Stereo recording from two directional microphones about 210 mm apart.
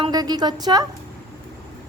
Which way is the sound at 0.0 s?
20° right (ahead or behind).